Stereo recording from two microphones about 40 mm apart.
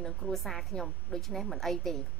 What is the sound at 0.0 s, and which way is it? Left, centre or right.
A woman's voice, centre.